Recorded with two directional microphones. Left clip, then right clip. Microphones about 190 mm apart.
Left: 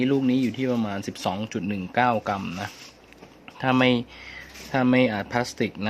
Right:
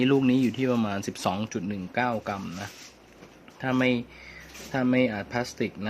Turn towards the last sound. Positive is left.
turn(degrees=15)  # may be behind; listen again after turning